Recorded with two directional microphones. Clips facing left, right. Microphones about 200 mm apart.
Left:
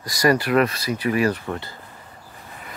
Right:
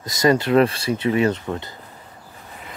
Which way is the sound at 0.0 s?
20° right (ahead or behind).